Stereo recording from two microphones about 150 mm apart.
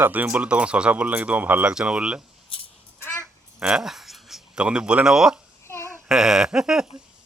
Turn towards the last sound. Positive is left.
turn(degrees=-5)  # may be behind; listen again after turning